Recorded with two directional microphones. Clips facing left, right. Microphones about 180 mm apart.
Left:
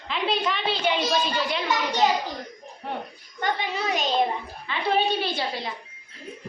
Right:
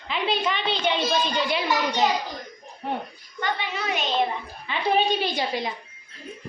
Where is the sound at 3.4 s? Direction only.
35° left (ahead or behind).